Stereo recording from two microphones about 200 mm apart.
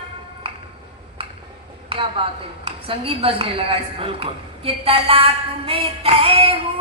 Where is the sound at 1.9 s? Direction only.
25° right (ahead or behind).